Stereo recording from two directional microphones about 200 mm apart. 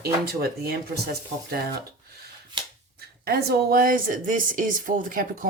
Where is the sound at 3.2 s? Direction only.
50° right (ahead or behind).